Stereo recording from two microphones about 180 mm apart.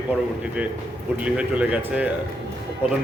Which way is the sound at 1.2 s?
5° right (ahead or behind).